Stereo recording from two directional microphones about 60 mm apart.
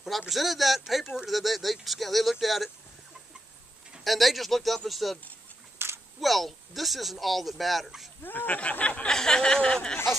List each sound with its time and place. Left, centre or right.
0.3 s speech: centre
4.0 s speech: centre
5.8 s a sound: right
6.2 s speech: centre
8.2 s speech: left
8.5 s speech: left
9.1 s speech: centre